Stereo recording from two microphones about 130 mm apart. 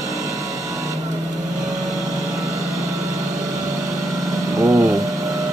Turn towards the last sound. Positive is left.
turn(degrees=-25)  # may be behind; listen again after turning